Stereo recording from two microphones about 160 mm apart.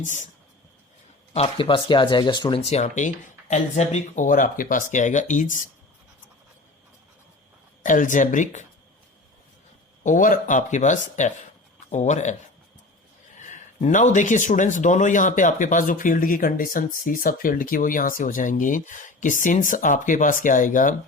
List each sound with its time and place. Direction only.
0.0 s speech: 50° left (ahead or behind)
1.3 s speech: 35° left (ahead or behind); by 5.5 s 50° left (ahead or behind)
7.8 s speech: 55° left (ahead or behind)
10.0 s speech: 55° left (ahead or behind)